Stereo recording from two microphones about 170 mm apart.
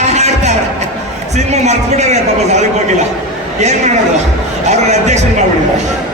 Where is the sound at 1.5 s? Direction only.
40° right (ahead or behind).